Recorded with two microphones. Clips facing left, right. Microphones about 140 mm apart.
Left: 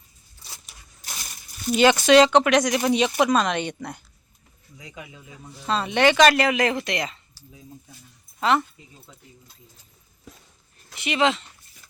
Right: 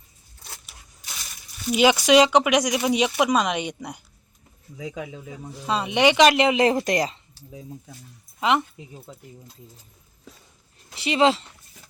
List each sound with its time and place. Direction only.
1.7 s speech: 10° right (ahead or behind)
5.6 s speech: 15° right (ahead or behind); by 7.1 s 40° right (ahead or behind)
8.4 s speech: 15° right (ahead or behind)
10.9 s speech: 30° right (ahead or behind)